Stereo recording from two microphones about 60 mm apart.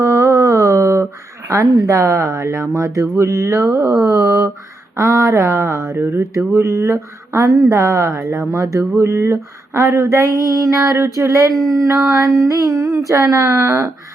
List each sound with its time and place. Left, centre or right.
0.0 s music: right
1.7 s female singing: right
4.0 s a sound: right
4.9 s female singing: right
7.7 s a woman's voice: right
8.4 s female singing: right
9.0 s female singing: right
11.5 s speech: centre
11.8 s female singing: right